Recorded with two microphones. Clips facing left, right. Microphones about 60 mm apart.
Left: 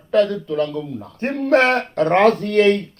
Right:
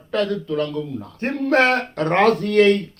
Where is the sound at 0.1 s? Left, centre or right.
Left.